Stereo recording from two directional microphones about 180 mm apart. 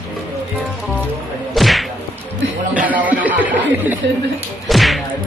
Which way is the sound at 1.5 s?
Centre (ahead or behind).